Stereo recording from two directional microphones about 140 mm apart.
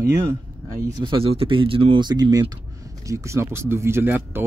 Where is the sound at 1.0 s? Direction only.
40° right (ahead or behind).